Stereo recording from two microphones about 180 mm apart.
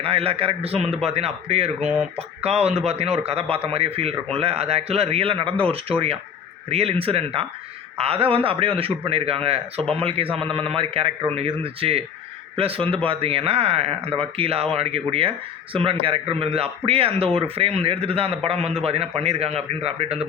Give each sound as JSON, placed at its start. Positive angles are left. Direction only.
{"t": 0.0, "sound": "speech", "side_deg": -35}